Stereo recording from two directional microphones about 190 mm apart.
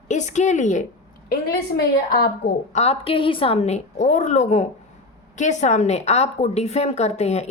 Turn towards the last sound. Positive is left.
turn(degrees=35)  # may be behind; listen again after turning